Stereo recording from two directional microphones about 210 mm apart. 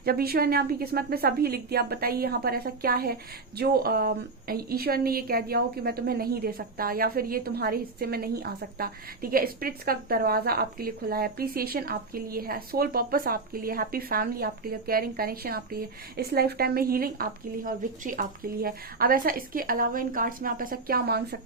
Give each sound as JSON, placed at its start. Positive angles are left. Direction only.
{"t": 0.0, "sound": "a woman's voice", "side_deg": -45}